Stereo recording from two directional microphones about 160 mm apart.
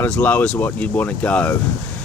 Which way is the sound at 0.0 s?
10° left (ahead or behind).